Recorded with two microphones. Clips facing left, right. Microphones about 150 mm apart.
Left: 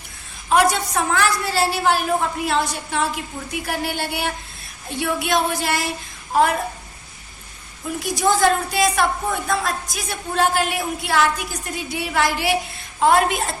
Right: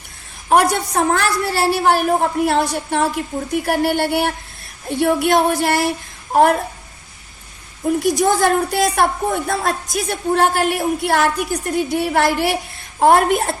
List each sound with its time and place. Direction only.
0.5 s a woman's voice: 55° right (ahead or behind)
7.9 s a woman's voice: 55° right (ahead or behind)